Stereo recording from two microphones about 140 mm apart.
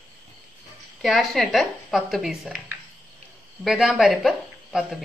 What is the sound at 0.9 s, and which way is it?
Speech, centre (ahead or behind).